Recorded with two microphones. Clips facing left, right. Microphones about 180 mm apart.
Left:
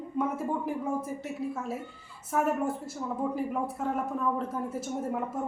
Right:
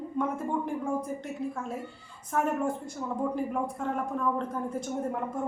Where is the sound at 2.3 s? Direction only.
5° left (ahead or behind).